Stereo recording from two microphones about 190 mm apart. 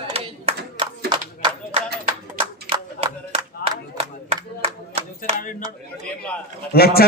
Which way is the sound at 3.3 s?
30° right (ahead or behind).